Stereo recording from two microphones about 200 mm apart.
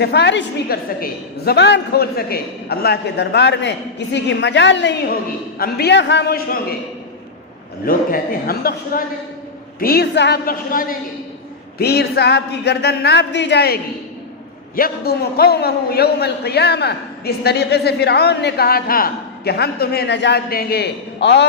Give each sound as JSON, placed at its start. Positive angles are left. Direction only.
{"t": 0.0, "sound": "a woman's voice", "side_deg": 60}
{"t": 5.5, "sound": "a man's voice", "side_deg": 50}
{"t": 7.9, "sound": "a man's voice", "side_deg": 45}
{"t": 14.8, "sound": "a man's voice", "side_deg": 50}